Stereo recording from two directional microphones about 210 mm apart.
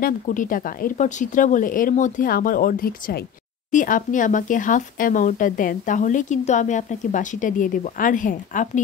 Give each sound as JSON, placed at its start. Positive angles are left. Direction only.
{"t": 0.0, "sound": "speech", "side_deg": 40}